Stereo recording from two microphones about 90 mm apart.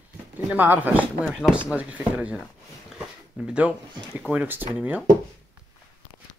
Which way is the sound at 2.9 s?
10° right (ahead or behind).